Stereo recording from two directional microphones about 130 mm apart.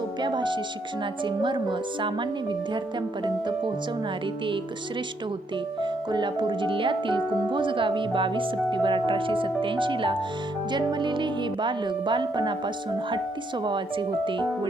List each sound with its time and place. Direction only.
0.2 s speech: 35° right (ahead or behind)
5.8 s speech: 35° right (ahead or behind)
14.3 s speech: 40° right (ahead or behind)